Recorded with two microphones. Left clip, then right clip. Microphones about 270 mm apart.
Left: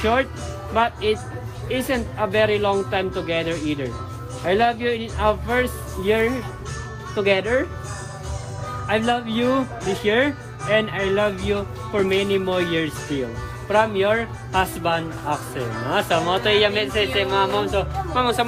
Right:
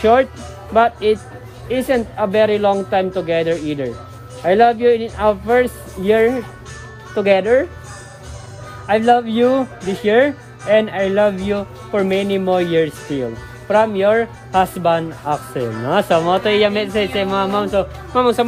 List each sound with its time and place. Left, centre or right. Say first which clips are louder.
0.0 s speech: right 7 dB; right
8.9 s speech: right 8 dB; right